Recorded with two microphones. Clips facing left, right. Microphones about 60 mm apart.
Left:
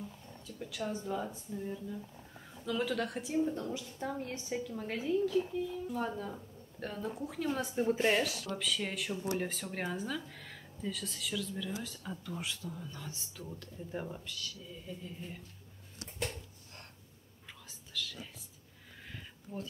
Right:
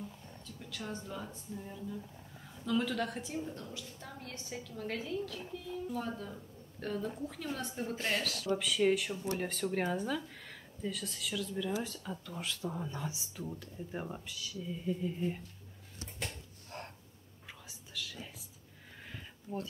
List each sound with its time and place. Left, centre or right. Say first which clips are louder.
0.0 s a sound: even; centre
0.7 s a woman's voice: left 5 dB; centre
5.7 s a woman's voice: left 1 dB; centre
8.5 s speech: right 8 dB; centre
12.6 s speech: right 5 dB; right
13.1 s speech: right 3 dB; centre
17.5 s whispering: right 1 dB; centre
19.0 s a sound: right 3 dB; centre